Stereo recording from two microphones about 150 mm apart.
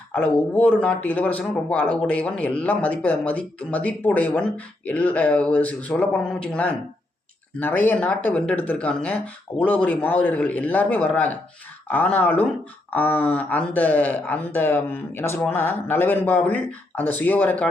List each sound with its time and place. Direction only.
0.1 s speech: 10° left (ahead or behind)